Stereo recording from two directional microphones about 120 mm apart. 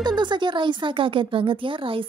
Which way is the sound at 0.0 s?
40° right (ahead or behind).